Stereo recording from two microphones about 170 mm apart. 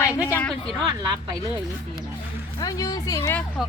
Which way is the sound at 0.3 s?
10° left (ahead or behind).